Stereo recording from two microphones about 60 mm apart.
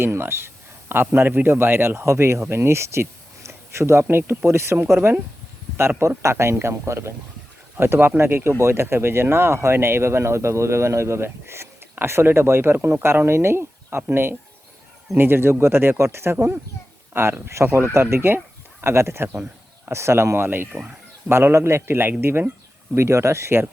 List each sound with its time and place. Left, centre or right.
0.0 s a man's voice: right
4.0 s a man's voice: right
4.4 s speech: right
6.0 s a man's voice: right